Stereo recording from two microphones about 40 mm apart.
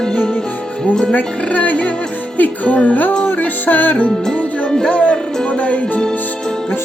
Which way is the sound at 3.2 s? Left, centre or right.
Left.